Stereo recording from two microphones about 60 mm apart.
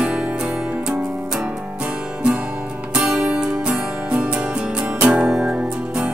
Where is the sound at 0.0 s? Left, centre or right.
Right.